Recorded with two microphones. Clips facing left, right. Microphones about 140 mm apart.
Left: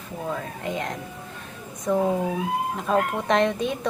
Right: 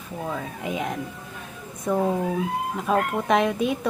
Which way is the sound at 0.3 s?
5° right (ahead or behind).